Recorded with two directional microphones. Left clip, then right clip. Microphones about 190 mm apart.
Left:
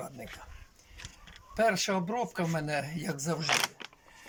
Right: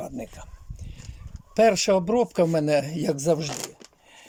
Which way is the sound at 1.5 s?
55° right (ahead or behind).